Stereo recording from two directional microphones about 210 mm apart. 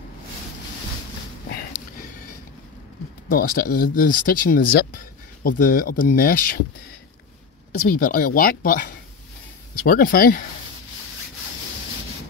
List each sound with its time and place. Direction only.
3.3 s speech: 40° left (ahead or behind)
8.0 s speech: 40° left (ahead or behind)